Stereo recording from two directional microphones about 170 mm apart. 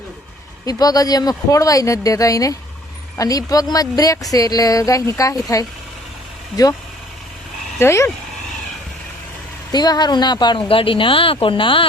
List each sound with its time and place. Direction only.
0.6 s speech: 20° left (ahead or behind)
7.8 s speech: 15° left (ahead or behind)
9.7 s speech: 25° left (ahead or behind)